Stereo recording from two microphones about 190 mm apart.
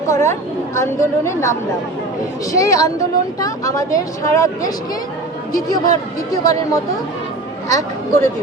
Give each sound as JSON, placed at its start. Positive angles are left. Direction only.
{"t": 0.1, "sound": "a woman's voice", "side_deg": 15}
{"t": 7.7, "sound": "a woman's voice", "side_deg": 20}